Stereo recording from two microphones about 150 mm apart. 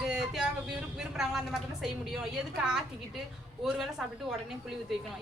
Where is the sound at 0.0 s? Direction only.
5° right (ahead or behind).